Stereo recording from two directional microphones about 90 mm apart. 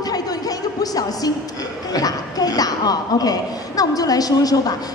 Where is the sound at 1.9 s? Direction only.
45° left (ahead or behind).